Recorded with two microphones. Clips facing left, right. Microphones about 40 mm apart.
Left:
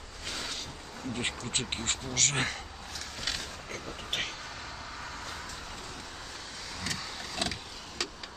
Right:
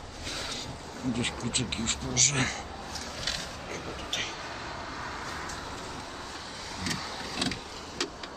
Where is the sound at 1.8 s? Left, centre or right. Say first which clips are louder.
Right 1 dB; left.